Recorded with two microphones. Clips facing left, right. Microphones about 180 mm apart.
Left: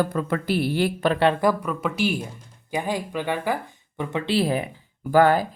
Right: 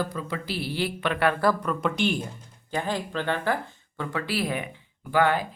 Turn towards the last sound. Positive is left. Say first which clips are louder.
# left 5 dB
turn(degrees=40)  # may be behind; listen again after turning